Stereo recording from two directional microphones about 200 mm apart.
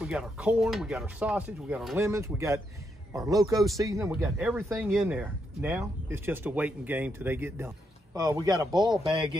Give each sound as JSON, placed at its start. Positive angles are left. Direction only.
{"t": 0.0, "sound": "speech", "side_deg": -5}
{"t": 2.0, "sound": "speech", "side_deg": -15}
{"t": 4.1, "sound": "speech", "side_deg": -5}